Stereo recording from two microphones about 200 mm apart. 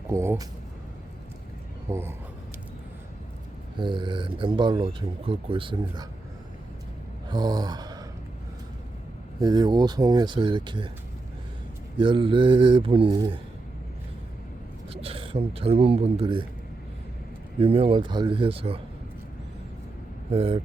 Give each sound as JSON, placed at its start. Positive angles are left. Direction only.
{"t": 0.1, "sound": "speech", "side_deg": -15}
{"t": 1.9, "sound": "speech", "side_deg": -10}
{"t": 3.8, "sound": "speech", "side_deg": -25}
{"t": 7.3, "sound": "gasp", "side_deg": -20}
{"t": 9.4, "sound": "speech", "side_deg": -20}
{"t": 11.9, "sound": "speech", "side_deg": -25}
{"t": 14.8, "sound": "speech", "side_deg": -30}
{"t": 17.6, "sound": "speech", "side_deg": -30}
{"t": 20.3, "sound": "speech", "side_deg": -30}